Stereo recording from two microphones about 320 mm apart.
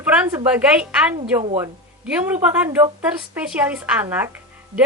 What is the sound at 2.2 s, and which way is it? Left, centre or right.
Speech, centre.